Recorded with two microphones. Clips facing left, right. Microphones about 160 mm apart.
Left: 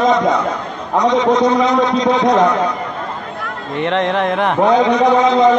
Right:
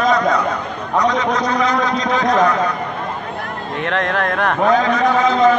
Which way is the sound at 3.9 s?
20° left (ahead or behind).